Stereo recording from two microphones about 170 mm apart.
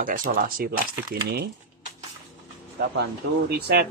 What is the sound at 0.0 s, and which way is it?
Speech, 55° right (ahead or behind).